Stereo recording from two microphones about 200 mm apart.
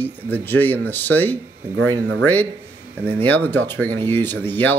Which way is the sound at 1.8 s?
90° right.